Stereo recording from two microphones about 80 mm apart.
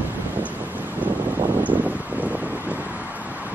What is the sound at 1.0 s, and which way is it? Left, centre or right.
Vehicle, right.